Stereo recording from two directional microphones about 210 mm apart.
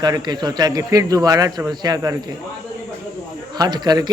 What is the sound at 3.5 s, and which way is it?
Speech, 20° right (ahead or behind).